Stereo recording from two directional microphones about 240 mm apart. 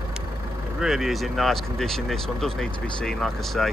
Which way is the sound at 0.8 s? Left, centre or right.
Centre.